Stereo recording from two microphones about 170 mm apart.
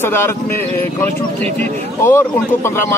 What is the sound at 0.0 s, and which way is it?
Speech, 15° left (ahead or behind).